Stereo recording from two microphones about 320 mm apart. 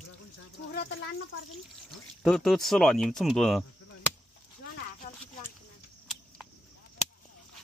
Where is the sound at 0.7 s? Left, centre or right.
Left.